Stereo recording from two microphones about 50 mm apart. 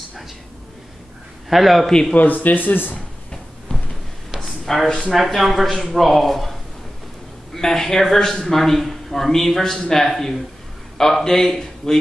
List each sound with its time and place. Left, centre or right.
1.5 s speech: centre
1.9 s a man's voice: centre
2.1 s speech: left
4.4 s a sound: centre
5.1 s speech: centre
7.5 s a man's voice: centre